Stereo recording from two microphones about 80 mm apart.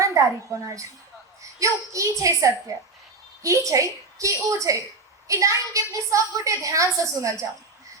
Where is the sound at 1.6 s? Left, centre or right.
Right.